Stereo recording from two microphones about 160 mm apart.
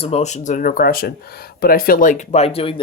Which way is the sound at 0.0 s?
40° left (ahead or behind).